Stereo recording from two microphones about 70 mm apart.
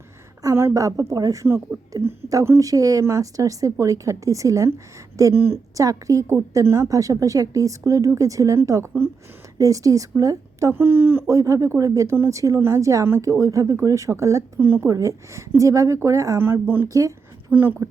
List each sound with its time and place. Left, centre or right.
0.7 s a woman's voice: right
3.0 s speech: right
5.3 s speech: right
5.7 s a woman's voice: right
10.7 s speech: right
11.3 s speech: right
12.5 s speech: right
14.6 s speech: right
14.8 s speech: right
16.4 s speech: right
16.9 s a woman's voice: right
17.5 s speech: right